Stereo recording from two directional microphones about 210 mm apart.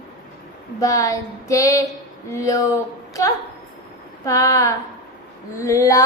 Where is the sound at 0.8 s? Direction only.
15° left (ahead or behind).